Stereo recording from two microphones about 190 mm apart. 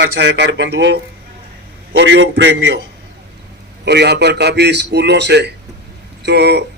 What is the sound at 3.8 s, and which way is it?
A man's voice, 60° right (ahead or behind).